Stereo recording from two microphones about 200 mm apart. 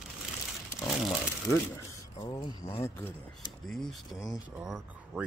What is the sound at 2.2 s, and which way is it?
Speech, 20° left (ahead or behind).